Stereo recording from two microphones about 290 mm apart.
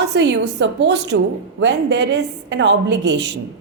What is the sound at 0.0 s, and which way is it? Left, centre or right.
A woman's voice, right.